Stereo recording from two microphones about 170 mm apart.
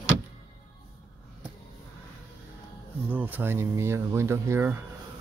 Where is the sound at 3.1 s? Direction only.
10° right (ahead or behind).